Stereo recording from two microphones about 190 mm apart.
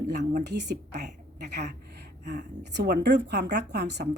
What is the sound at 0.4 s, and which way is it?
A woman's voice, 65° right (ahead or behind).